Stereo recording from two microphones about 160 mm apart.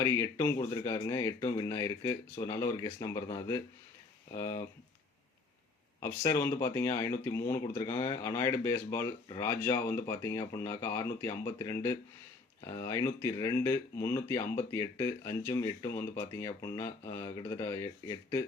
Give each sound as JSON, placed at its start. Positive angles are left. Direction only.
{"t": 0.0, "sound": "speech", "side_deg": 20}
{"t": 4.4, "sound": "speech", "side_deg": 20}
{"t": 6.0, "sound": "speech", "side_deg": 15}